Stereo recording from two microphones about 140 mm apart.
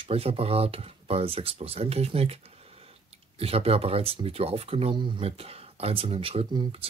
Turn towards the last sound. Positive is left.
turn(degrees=-40)  # may be behind; listen again after turning